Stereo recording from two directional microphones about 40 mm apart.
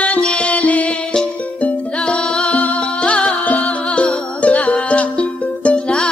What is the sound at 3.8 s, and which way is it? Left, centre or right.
Music, left.